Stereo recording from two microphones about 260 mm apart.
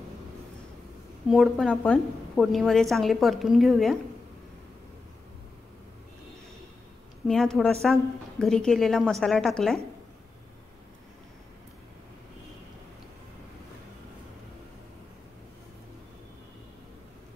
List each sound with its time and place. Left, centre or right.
1.3 s a woman's voice: centre
7.2 s a woman's voice: centre